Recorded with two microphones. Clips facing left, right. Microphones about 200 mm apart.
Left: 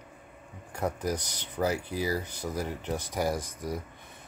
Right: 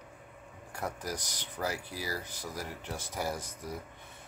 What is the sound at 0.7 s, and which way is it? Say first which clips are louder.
Speech: left 7 dB; 20° left (ahead or behind).